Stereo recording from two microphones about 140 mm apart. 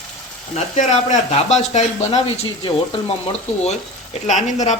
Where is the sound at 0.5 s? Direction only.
55° left (ahead or behind).